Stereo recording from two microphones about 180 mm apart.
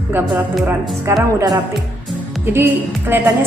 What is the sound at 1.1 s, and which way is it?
Speech, 15° right (ahead or behind).